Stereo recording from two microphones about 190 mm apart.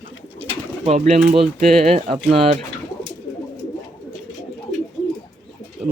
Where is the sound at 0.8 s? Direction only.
35° right (ahead or behind).